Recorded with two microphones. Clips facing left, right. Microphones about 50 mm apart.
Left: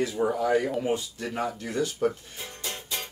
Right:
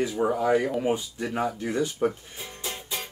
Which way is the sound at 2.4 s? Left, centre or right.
Centre.